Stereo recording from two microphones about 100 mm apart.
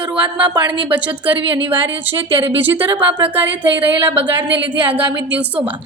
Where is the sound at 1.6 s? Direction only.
65° right (ahead or behind).